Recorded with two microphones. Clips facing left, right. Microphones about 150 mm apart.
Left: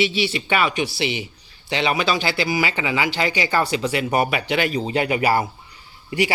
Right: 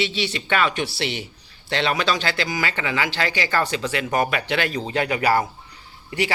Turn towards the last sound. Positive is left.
turn(degrees=10)  # may be behind; listen again after turning